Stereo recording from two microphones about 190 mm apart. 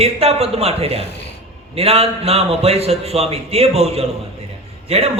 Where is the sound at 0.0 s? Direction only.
30° right (ahead or behind).